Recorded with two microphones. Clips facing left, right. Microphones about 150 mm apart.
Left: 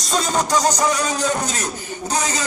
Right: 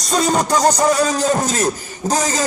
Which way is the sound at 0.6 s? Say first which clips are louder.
Right 4 dB; 50° right (ahead or behind).